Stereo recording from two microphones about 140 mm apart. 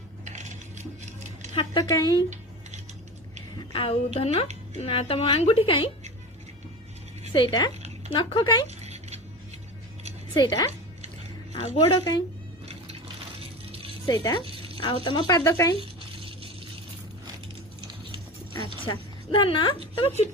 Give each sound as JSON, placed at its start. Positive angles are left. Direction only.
{"t": 0.3, "sound": "cutlery", "side_deg": -55}
{"t": 1.8, "sound": "speech", "side_deg": 25}
{"t": 3.7, "sound": "a woman's voice", "side_deg": 40}
{"t": 7.3, "sound": "speech", "side_deg": 30}
{"t": 8.6, "sound": "a sound", "side_deg": -50}
{"t": 10.3, "sound": "speech", "side_deg": 30}
{"t": 11.6, "sound": "speech", "side_deg": 45}
{"t": 13.4, "sound": "music", "side_deg": -40}
{"t": 14.1, "sound": "speech", "side_deg": 30}
{"t": 14.4, "sound": "a sound", "side_deg": -40}
{"t": 14.8, "sound": "speech", "side_deg": 35}
{"t": 15.4, "sound": "speech", "side_deg": 20}
{"t": 15.8, "sound": "a sound", "side_deg": -40}
{"t": 18.9, "sound": "a woman's voice", "side_deg": 35}